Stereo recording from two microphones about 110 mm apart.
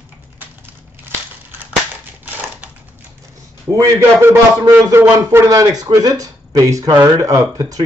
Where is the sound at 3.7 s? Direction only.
30° right (ahead or behind).